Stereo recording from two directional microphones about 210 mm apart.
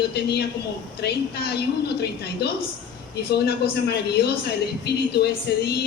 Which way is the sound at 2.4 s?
50° left (ahead or behind).